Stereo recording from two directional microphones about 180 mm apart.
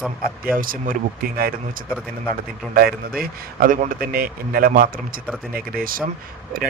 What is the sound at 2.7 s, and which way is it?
Speech, 55° right (ahead or behind).